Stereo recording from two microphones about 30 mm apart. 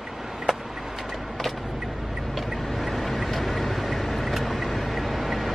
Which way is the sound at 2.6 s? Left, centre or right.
Centre.